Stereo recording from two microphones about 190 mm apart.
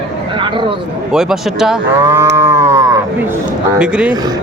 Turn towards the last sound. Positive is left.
turn(degrees=-5)  # may be behind; listen again after turning